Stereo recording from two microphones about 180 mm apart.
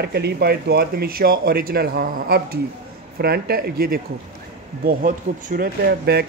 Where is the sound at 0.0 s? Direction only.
65° right (ahead or behind).